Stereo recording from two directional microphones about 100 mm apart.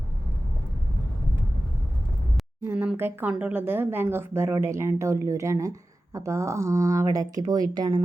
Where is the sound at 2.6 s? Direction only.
20° right (ahead or behind).